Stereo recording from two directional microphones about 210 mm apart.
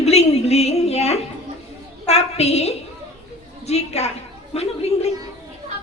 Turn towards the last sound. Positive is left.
turn(degrees=30)  # may be behind; listen again after turning